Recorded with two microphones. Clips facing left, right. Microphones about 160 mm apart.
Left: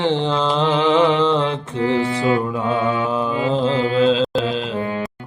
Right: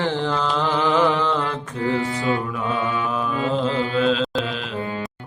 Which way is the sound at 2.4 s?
25° left (ahead or behind).